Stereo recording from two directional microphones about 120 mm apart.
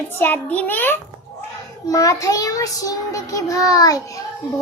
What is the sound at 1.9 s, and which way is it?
Child singing, 30° left (ahead or behind).